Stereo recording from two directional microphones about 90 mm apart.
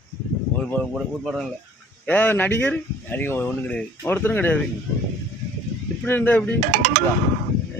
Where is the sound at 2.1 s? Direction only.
20° left (ahead or behind).